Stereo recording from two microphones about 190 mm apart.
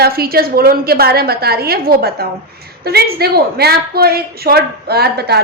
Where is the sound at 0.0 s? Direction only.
55° right (ahead or behind).